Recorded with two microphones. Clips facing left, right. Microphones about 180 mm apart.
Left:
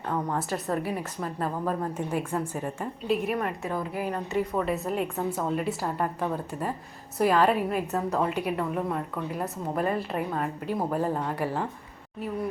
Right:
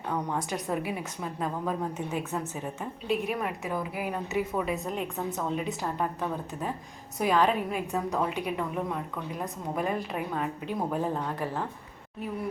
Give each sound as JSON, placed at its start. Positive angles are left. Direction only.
{"t": 0.1, "sound": "a woman's voice", "side_deg": 0}